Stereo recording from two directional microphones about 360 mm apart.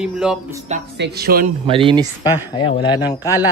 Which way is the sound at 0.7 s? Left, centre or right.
Right.